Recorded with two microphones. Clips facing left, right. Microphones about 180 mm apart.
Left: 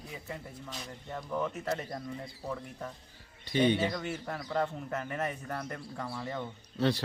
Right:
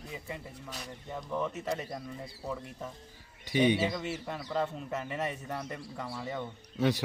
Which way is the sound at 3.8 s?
Centre (ahead or behind).